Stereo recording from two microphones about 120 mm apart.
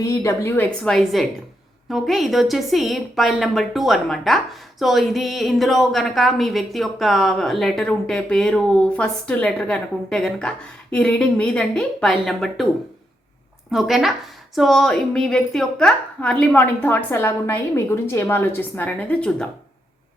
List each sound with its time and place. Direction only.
0.0 s speech: 25° left (ahead or behind)
0.9 s a woman's voice: 5° left (ahead or behind)
13.7 s a woman's voice: 5° right (ahead or behind)